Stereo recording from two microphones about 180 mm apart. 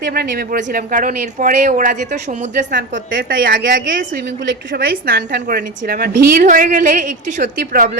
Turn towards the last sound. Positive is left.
turn(degrees=-50)  # may be behind; listen again after turning